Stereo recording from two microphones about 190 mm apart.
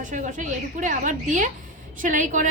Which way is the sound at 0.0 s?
40° right (ahead or behind).